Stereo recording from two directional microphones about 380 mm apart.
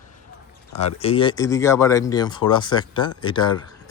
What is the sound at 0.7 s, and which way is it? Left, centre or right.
Speech, centre.